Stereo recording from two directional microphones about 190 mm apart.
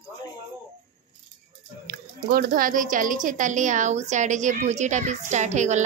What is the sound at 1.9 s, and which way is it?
A woman's voice, 50° right (ahead or behind).